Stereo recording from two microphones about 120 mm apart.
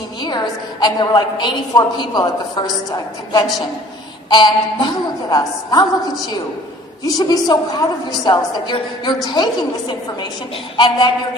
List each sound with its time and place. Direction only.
0.2 s a sound: 40° left (ahead or behind)
0.8 s a woman's voice: 35° left (ahead or behind)
4.3 s a woman's voice: 40° left (ahead or behind)
7.0 s a woman's voice: 35° left (ahead or behind)